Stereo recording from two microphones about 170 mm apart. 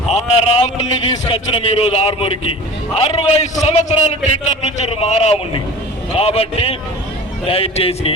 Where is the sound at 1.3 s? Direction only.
35° left (ahead or behind).